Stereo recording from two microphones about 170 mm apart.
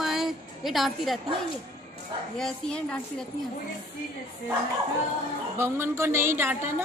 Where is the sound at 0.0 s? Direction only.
Centre (ahead or behind).